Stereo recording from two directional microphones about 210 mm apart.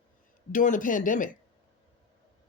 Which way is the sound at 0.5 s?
40° left (ahead or behind).